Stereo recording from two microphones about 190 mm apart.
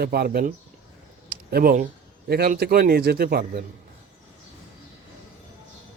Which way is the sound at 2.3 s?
55° right (ahead or behind).